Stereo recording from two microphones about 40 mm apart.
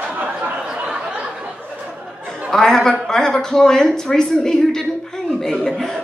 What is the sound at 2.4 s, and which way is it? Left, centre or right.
A man's voice, centre.